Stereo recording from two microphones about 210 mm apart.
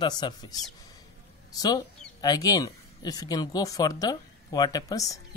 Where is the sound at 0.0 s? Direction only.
20° left (ahead or behind).